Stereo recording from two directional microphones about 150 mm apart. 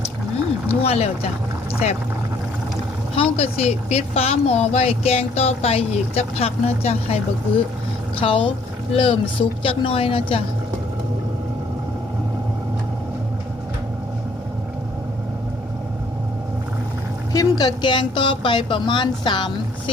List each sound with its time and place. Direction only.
0.7 s speech: 45° left (ahead or behind)
3.2 s speech: 45° left (ahead or behind)
8.2 s speech: 35° left (ahead or behind)
17.3 s speech: 25° left (ahead or behind)